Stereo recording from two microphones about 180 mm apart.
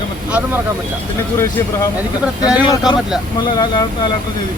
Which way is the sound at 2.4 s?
20° left (ahead or behind).